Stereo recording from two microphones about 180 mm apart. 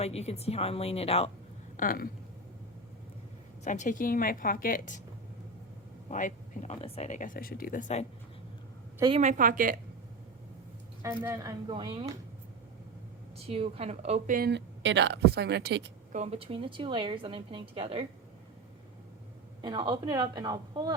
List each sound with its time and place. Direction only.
0.0 s speech: 35° left (ahead or behind)
1.7 s speech: 50° left (ahead or behind)
3.6 s speech: 45° left (ahead or behind)
6.1 s speech: 45° left (ahead or behind)
9.1 s a woman's voice: 45° right (ahead or behind)
11.0 s speech: 15° right (ahead or behind)
11.7 s a woman's voice: 30° right (ahead or behind)
13.3 s a woman's voice: 35° right (ahead or behind)
14.3 s a woman's voice: 65° right (ahead or behind)
16.1 s a woman's voice: 35° right (ahead or behind)
19.6 s a woman's voice: 25° right (ahead or behind)